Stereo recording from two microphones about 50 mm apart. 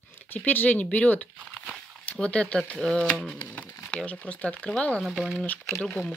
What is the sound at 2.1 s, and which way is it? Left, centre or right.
Speech, centre.